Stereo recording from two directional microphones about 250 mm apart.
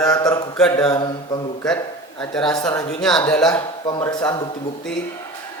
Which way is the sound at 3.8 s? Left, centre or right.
Centre.